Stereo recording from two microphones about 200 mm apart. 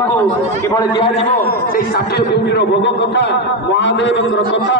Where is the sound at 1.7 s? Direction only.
50° left (ahead or behind).